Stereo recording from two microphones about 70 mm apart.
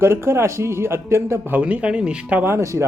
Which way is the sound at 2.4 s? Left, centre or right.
Right.